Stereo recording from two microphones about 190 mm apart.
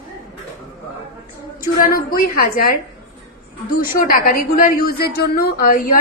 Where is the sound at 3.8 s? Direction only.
50° left (ahead or behind).